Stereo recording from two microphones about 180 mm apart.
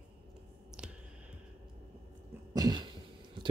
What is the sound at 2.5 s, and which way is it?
Cough, 20° right (ahead or behind).